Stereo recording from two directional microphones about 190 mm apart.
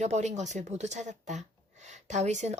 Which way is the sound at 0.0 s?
35° right (ahead or behind).